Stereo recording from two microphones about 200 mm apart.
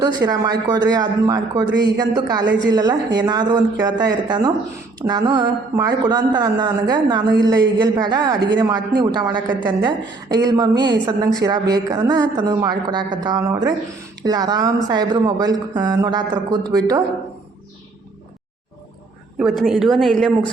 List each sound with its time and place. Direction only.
0.0 s speech: 20° right (ahead or behind)
1.6 s speech: 65° right (ahead or behind)
2.0 s speech: 20° right (ahead or behind)
19.4 s a woman's voice: centre (ahead or behind)